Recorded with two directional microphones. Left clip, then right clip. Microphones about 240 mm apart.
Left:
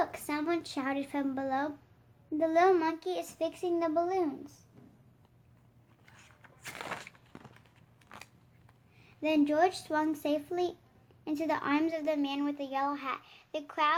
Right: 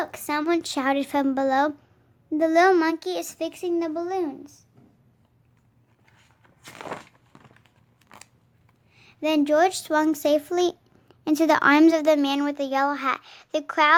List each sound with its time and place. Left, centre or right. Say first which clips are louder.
0.0 s a child's voice: right 6 dB; right
6.6 s walk: right 4 dB; centre
9.0 s a child's voice: right 6 dB; right